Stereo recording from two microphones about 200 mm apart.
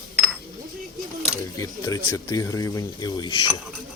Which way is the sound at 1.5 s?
15° left (ahead or behind).